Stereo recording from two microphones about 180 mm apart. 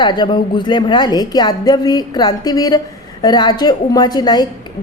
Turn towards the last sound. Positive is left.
turn(degrees=20)  # may be behind; listen again after turning